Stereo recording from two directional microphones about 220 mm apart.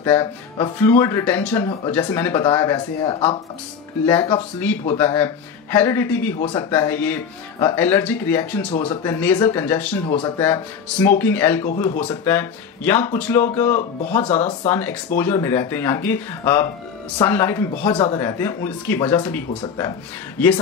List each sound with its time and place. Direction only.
0.0 s speech: 10° left (ahead or behind)
10.0 s speech: 25° left (ahead or behind)
10.4 s speech: 10° left (ahead or behind)
17.9 s speech: 25° left (ahead or behind)
18.2 s speech: 10° left (ahead or behind)